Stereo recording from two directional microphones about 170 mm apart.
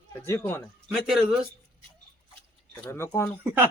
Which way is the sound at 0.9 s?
Centre (ahead or behind).